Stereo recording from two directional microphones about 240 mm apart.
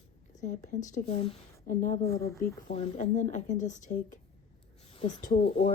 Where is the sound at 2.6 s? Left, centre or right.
Left.